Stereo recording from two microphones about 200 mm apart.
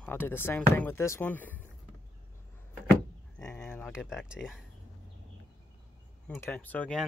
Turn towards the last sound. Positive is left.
turn(degrees=5)  # may be behind; listen again after turning